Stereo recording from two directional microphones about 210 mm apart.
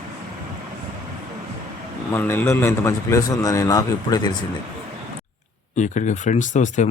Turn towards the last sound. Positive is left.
turn(degrees=35)  # may be behind; listen again after turning